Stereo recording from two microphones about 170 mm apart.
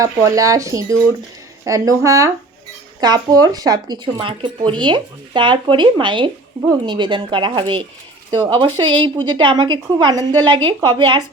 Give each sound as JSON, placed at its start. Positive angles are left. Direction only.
{"t": 0.0, "sound": "speech", "side_deg": -20}